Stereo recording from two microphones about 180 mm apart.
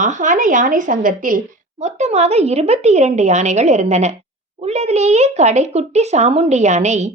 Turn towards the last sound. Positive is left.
turn(degrees=-40)  # may be behind; listen again after turning